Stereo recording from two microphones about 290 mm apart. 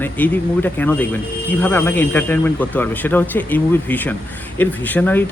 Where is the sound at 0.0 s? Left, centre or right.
Centre.